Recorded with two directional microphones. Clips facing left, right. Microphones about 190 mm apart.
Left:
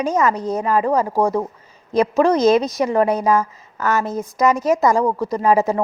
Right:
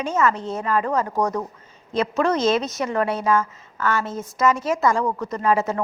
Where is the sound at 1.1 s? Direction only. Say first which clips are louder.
Left 5 dB; 30° left (ahead or behind).